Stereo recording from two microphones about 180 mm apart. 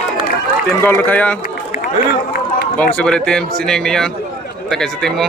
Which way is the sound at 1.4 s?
55° left (ahead or behind).